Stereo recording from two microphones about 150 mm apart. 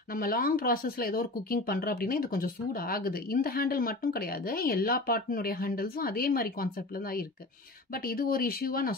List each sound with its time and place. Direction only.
0.1 s speech: 75° left (ahead or behind)